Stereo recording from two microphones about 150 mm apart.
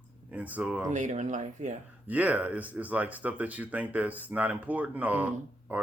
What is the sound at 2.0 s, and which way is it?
Speech, 10° right (ahead or behind).